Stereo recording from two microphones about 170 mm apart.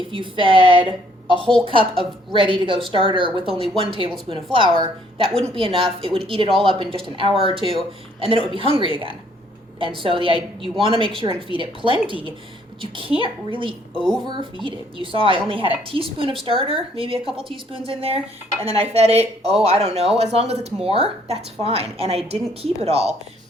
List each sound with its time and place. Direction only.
0.1 s a woman's voice: 30° right (ahead or behind)
13.9 s a woman's voice: 5° left (ahead or behind)
14.3 s speech: 30° right (ahead or behind)